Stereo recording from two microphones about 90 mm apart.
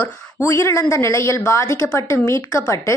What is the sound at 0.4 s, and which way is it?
A woman's voice, 35° left (ahead or behind).